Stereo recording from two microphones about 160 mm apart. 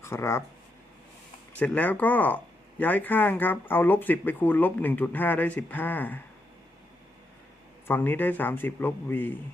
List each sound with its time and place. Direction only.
0.0 s speech: 15° left (ahead or behind)
1.5 s speech: 10° left (ahead or behind)
7.9 s speech: 10° left (ahead or behind)